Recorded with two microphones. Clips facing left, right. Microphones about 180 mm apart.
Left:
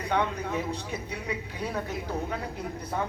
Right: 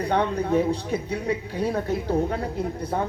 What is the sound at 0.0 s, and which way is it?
A woman's voice, 35° right (ahead or behind).